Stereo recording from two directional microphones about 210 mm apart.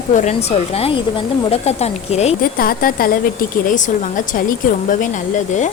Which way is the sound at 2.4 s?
45° left (ahead or behind).